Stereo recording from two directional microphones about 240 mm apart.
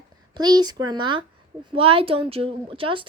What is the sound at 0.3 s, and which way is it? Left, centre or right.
A woman's voice, centre.